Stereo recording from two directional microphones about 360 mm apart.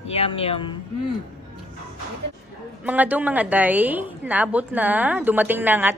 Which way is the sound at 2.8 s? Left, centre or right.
Centre.